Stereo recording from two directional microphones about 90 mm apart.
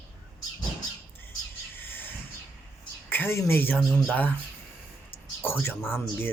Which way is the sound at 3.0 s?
25° left (ahead or behind).